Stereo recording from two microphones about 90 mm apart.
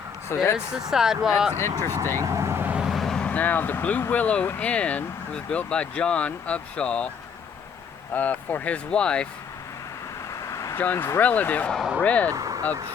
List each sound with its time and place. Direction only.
0.3 s speech: 30° left (ahead or behind)
0.7 s speech: 5° right (ahead or behind)
2.1 s vehicle: 35° right (ahead or behind)
2.7 s vehicle: 5° right (ahead or behind)
3.2 s speech: 20° left (ahead or behind)
8.1 s speech: 20° left (ahead or behind)
10.5 s vehicle: 35° left (ahead or behind)
10.8 s speech: 20° left (ahead or behind)
12.3 s speech: 40° right (ahead or behind)